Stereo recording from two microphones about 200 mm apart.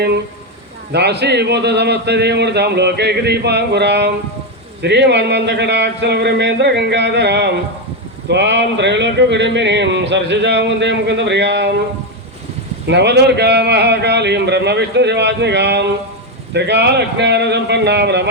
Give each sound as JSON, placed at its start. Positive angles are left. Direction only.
{"t": 0.9, "sound": "speech", "side_deg": -55}
{"t": 12.9, "sound": "speech", "side_deg": -60}